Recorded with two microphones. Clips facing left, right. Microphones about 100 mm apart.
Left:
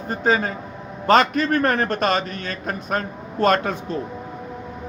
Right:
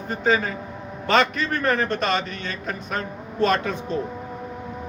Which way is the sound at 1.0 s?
40° left (ahead or behind).